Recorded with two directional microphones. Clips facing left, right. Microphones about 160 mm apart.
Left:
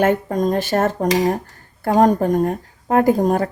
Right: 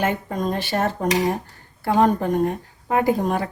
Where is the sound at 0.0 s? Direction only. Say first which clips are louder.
Left 6 dB; 45° left (ahead or behind).